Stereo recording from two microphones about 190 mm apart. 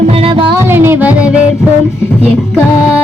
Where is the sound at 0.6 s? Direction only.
10° right (ahead or behind).